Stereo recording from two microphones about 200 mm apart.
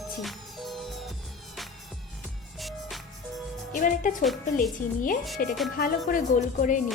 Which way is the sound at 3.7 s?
40° left (ahead or behind).